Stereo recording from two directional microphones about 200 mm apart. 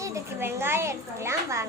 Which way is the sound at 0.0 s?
15° right (ahead or behind).